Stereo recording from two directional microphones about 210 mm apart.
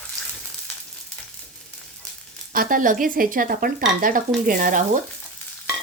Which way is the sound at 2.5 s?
40° right (ahead or behind).